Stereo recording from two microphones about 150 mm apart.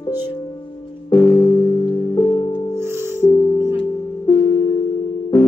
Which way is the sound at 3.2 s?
25° left (ahead or behind).